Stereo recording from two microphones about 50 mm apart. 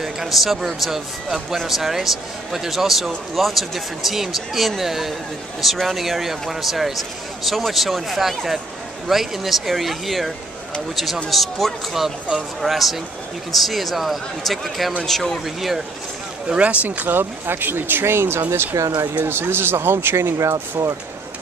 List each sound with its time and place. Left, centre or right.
0.0 s a man's voice: centre
15.4 s a man's voice: centre
16.4 s speech: right